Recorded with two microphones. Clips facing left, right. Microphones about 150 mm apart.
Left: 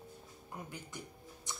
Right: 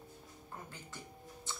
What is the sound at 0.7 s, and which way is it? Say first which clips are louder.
Music: left 3 dB; 15° left (ahead or behind).